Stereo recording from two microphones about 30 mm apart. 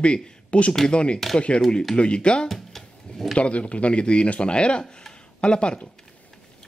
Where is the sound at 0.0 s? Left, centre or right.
Left.